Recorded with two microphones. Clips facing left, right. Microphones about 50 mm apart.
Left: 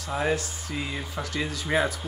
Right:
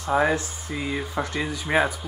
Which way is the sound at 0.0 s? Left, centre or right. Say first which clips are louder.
Right 5 dB; right.